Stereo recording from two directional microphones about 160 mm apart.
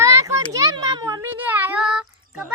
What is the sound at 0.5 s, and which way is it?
Children playing, 20° right (ahead or behind).